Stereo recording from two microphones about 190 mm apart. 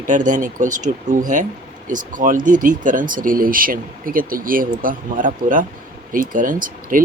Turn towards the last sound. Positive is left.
turn(degrees=-45)  # may be behind; listen again after turning